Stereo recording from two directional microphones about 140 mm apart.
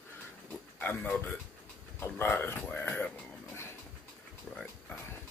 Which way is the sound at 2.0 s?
15° left (ahead or behind).